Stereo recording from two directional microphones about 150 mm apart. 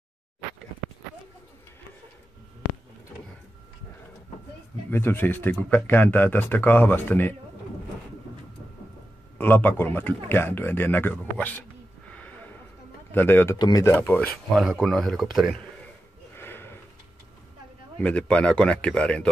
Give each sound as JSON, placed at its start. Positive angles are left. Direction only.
{"t": 4.9, "sound": "speech", "side_deg": 15}
{"t": 9.4, "sound": "speech", "side_deg": 10}
{"t": 12.1, "sound": "a sound", "side_deg": 10}
{"t": 13.1, "sound": "speech", "side_deg": 15}
{"t": 13.6, "sound": "speech", "side_deg": 25}
{"t": 13.9, "sound": "speech", "side_deg": 10}
{"t": 16.3, "sound": "a sound", "side_deg": 15}
{"t": 17.9, "sound": "speech", "side_deg": 10}